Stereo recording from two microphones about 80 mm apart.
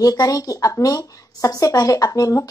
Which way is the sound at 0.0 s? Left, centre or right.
Left.